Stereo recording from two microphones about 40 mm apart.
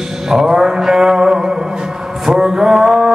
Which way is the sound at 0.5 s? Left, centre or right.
Centre.